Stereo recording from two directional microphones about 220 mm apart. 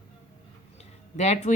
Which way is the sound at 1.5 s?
35° left (ahead or behind).